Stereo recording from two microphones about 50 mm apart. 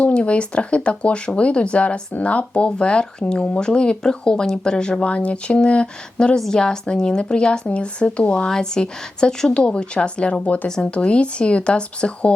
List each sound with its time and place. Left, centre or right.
0.0 s speech: left